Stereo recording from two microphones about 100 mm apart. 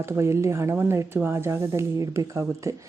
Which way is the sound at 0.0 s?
25° right (ahead or behind).